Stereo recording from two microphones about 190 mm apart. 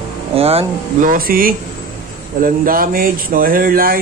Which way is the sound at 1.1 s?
50° right (ahead or behind).